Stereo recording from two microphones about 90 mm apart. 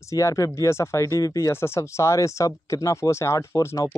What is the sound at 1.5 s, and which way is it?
Speech, 30° left (ahead or behind).